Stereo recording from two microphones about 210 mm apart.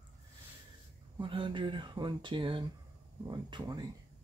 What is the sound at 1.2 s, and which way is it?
Speech, 25° right (ahead or behind).